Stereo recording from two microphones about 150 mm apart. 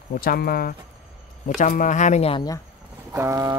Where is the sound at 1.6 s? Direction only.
55° left (ahead or behind).